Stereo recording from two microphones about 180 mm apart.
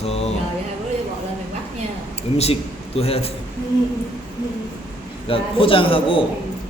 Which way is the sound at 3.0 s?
35° left (ahead or behind).